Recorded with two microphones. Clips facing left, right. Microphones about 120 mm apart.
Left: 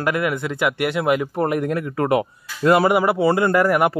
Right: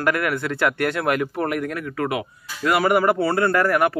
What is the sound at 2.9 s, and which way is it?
A man's voice, 15° left (ahead or behind).